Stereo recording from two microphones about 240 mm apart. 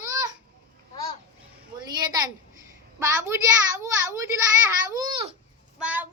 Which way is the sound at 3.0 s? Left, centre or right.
Centre.